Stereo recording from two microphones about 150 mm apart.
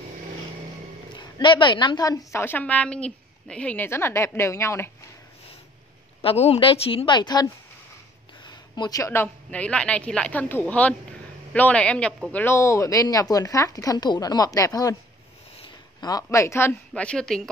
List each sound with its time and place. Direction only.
1.1 s a woman's voice: 30° left (ahead or behind)
6.2 s a woman's voice: 45° left (ahead or behind)
8.5 s a woman's voice: 30° left (ahead or behind); by 17.4 s 5° left (ahead or behind)